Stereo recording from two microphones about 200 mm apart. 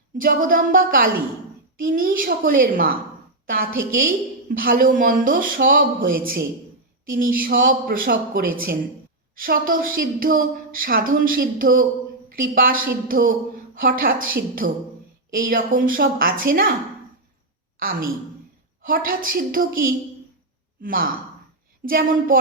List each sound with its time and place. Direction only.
0.2 s a woman's voice: 45° right (ahead or behind)
18.8 s a woman's voice: 45° right (ahead or behind)